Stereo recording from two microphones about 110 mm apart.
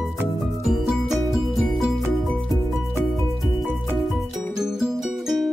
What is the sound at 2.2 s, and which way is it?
Music, 5° left (ahead or behind).